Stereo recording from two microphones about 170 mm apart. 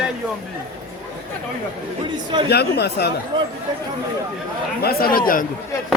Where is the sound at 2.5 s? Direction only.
70° left (ahead or behind).